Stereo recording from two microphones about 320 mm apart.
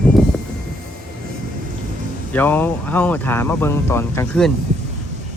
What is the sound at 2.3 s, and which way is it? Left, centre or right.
Speech, centre.